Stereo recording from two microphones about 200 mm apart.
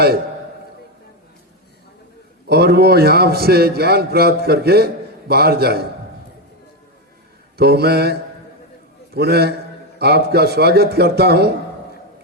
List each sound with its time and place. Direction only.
2.5 s a man's voice: 55° right (ahead or behind)
7.5 s a man's voice: 50° right (ahead or behind)
9.1 s a man's voice: 55° right (ahead or behind)